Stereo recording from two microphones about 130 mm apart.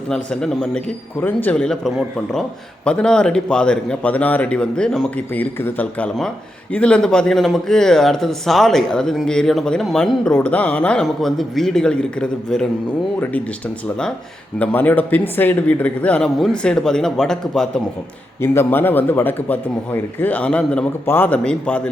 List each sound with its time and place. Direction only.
0.1 s a man's voice: 5° left (ahead or behind)
14.6 s a man's voice: 10° left (ahead or behind)
18.3 s a man's voice: 20° left (ahead or behind)